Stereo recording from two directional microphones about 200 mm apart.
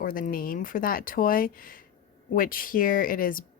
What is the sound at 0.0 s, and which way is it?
Speech, 45° left (ahead or behind).